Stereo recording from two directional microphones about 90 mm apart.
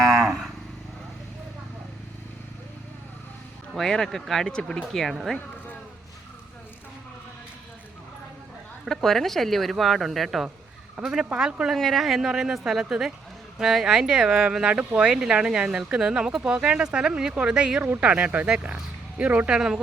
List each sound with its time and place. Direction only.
0.0 s vehicle: centre (ahead or behind)
3.8 s speech: 5° left (ahead or behind)
8.8 s speech: centre (ahead or behind)
17.8 s speech: 20° right (ahead or behind)